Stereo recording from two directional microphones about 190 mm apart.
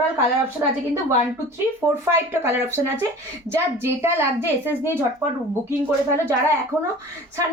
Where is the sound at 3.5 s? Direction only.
10° right (ahead or behind).